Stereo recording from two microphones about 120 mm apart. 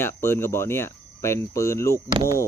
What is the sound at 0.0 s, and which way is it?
Speech, 20° left (ahead or behind).